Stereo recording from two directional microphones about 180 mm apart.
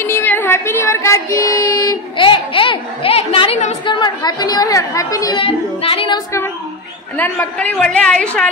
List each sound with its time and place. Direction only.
0.0 s child singing: 10° left (ahead or behind); by 3.7 s 40° left (ahead or behind)
3.8 s child singing: 25° left (ahead or behind)
7.2 s a woman's voice: 10° left (ahead or behind)